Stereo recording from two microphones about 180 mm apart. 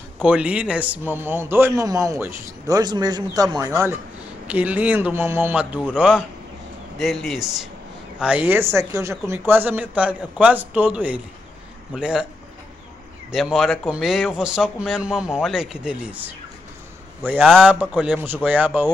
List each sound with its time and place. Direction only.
0.2 s a man's voice: 5° right (ahead or behind)
13.3 s a man's voice: centre (ahead or behind)